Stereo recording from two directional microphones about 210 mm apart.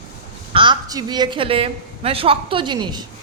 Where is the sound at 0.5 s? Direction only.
20° right (ahead or behind).